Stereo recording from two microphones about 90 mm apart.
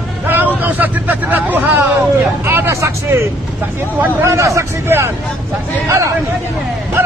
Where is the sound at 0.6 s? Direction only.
20° right (ahead or behind).